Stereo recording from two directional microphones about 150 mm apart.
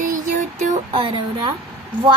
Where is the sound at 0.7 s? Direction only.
40° right (ahead or behind).